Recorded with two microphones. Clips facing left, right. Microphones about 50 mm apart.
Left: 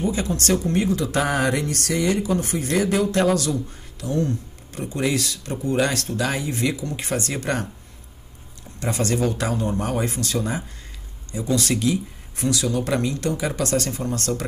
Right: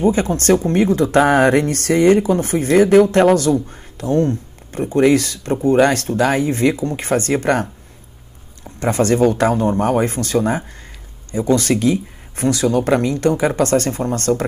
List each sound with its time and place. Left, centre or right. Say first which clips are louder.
0.0 s speech: right 8 dB; right
8.7 s speech: right 8 dB; right